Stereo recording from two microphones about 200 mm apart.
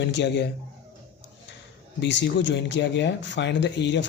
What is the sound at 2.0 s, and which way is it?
Speech, 60° left (ahead or behind).